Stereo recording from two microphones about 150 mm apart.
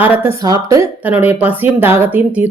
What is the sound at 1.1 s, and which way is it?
Speech, 10° right (ahead or behind).